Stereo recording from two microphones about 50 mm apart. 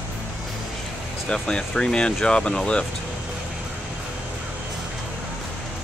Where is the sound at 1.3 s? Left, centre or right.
Centre.